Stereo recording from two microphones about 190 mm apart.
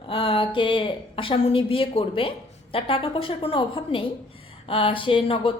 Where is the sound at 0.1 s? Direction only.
25° left (ahead or behind).